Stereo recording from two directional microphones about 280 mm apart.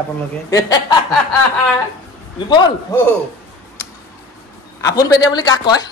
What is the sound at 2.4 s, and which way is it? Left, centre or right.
Speech, centre.